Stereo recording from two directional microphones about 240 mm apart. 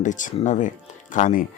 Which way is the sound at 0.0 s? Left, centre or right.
Left.